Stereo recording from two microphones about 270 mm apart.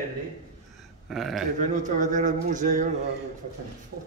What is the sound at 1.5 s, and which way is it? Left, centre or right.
A man's voice, right.